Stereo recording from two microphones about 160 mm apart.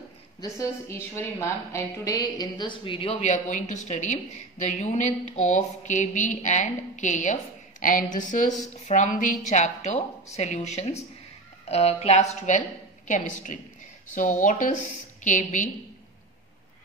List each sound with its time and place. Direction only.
0.4 s a woman's voice: 20° left (ahead or behind); by 15.7 s 50° left (ahead or behind)